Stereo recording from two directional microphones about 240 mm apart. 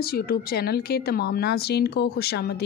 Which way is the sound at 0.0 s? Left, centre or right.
Left.